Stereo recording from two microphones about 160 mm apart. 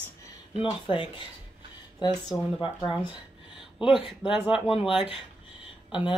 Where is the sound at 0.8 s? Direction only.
30° left (ahead or behind).